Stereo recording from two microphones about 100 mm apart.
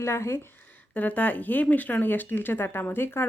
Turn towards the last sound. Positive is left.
turn(degrees=20)  # may be behind; listen again after turning